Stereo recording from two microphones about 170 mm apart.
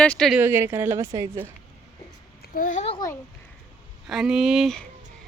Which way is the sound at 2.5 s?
50° left (ahead or behind).